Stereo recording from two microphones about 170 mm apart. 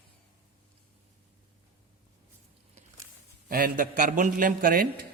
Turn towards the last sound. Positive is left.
turn(degrees=-55)  # may be behind; listen again after turning